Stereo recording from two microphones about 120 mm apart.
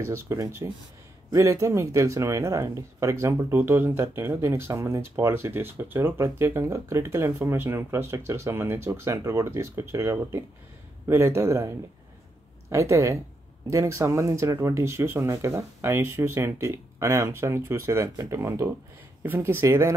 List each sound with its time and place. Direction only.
0.0 s speech: 25° right (ahead or behind)